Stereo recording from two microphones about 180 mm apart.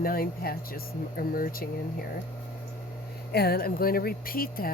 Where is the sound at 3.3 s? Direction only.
60° left (ahead or behind).